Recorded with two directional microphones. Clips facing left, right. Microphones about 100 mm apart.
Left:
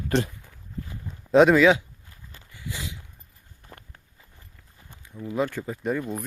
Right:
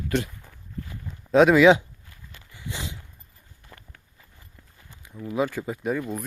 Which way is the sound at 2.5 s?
20° right (ahead or behind).